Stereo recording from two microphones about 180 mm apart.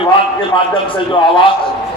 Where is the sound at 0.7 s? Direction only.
30° left (ahead or behind).